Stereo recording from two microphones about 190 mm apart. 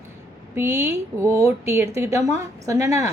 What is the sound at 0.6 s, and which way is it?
A woman's voice, 10° right (ahead or behind).